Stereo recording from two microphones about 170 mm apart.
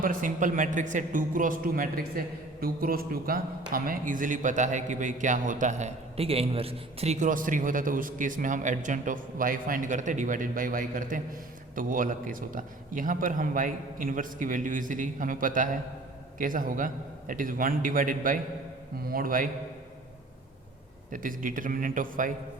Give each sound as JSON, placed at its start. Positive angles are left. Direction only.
{"t": 0.0, "sound": "a man's voice", "side_deg": -55}
{"t": 21.1, "sound": "a man's voice", "side_deg": -50}